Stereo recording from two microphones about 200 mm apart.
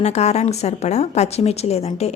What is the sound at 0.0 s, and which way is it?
Speech, 35° left (ahead or behind).